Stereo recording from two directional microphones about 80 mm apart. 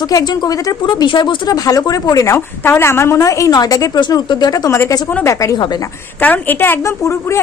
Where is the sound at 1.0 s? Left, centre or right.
Left.